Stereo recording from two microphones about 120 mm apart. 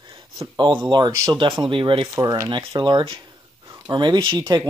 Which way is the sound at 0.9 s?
35° right (ahead or behind).